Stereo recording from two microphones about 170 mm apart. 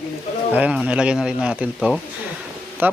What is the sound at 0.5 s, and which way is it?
Speech, 5° right (ahead or behind).